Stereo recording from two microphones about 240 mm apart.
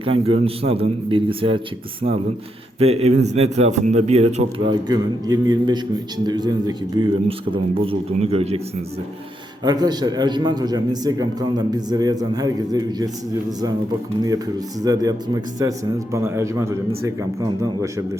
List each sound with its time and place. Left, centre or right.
0.0 s speech: right
4.9 s a man's voice: centre
9.6 s a man's voice: centre
14.8 s a man's voice: centre